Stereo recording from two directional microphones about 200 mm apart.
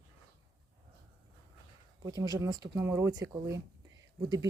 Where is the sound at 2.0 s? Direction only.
20° right (ahead or behind).